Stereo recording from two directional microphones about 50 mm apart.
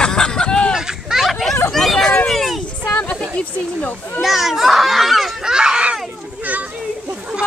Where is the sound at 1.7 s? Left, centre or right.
Centre.